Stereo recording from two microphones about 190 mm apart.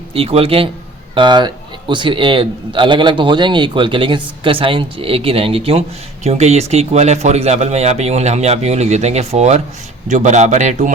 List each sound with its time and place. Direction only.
0.1 s a man's voice: 30° right (ahead or behind)